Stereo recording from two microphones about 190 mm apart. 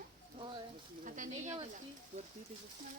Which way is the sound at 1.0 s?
45° right (ahead or behind).